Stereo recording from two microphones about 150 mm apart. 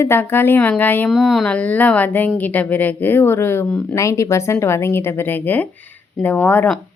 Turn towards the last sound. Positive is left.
turn(degrees=10)  # may be behind; listen again after turning